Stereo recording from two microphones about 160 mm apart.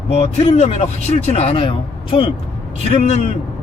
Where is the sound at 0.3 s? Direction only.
40° left (ahead or behind).